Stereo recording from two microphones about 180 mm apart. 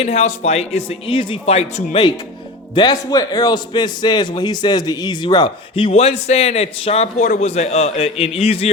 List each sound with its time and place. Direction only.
0.0 s a man's voice: 35° left (ahead or behind)